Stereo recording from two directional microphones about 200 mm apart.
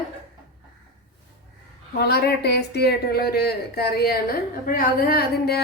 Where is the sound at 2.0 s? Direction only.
50° left (ahead or behind).